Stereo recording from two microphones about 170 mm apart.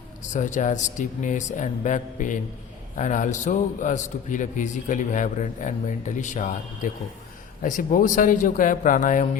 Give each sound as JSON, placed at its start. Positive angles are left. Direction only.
{"t": 0.2, "sound": "a man's voice", "side_deg": 45}